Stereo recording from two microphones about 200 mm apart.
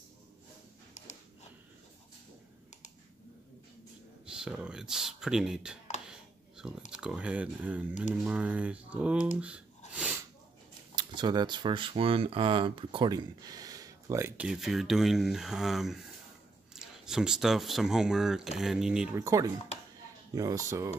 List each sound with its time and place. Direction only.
4.4 s speech: 5° right (ahead or behind)
6.0 s a sound: 5° right (ahead or behind)
6.9 s speech: 5° right (ahead or behind)
9.9 s a sound: 5° right (ahead or behind)
11.0 s speech: 20° right (ahead or behind); by 19.0 s centre (ahead or behind)
19.1 s speech: 15° right (ahead or behind)